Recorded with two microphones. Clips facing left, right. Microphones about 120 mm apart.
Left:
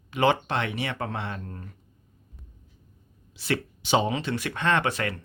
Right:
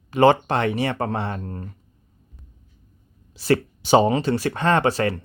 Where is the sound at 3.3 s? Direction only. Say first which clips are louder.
Right 8 dB; 40° right (ahead or behind).